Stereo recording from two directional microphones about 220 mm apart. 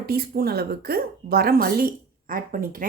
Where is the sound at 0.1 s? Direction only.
45° right (ahead or behind).